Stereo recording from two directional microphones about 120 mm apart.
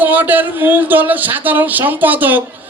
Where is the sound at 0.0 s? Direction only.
15° right (ahead or behind).